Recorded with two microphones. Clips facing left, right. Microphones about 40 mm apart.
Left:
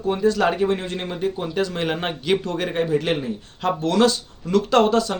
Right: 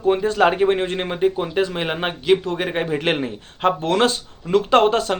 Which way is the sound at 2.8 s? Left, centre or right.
Right.